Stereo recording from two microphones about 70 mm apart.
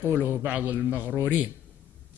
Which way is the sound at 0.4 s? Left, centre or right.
Right.